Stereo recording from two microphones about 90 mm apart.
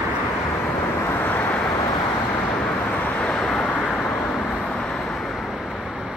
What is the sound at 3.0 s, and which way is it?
Vehicle, 15° left (ahead or behind).